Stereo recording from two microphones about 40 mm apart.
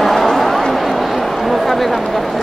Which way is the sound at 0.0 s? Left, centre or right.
Centre.